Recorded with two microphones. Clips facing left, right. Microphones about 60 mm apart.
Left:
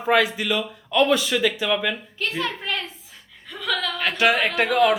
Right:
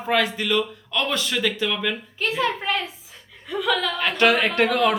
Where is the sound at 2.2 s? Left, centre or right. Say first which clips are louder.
Right 6 dB; centre.